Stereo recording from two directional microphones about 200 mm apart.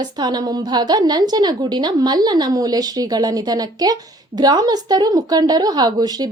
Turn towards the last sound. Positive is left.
turn(degrees=-20)  # may be behind; listen again after turning